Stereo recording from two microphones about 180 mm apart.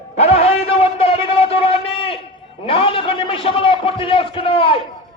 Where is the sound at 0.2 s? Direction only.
35° left (ahead or behind).